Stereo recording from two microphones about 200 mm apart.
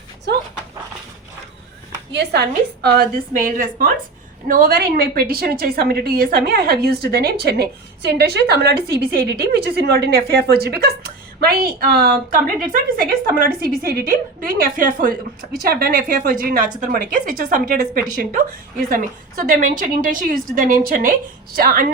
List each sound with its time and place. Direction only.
0.3 s dog: 55° right (ahead or behind)
2.1 s a woman's voice: 55° right (ahead or behind)
19.5 s a woman's voice: 40° right (ahead or behind)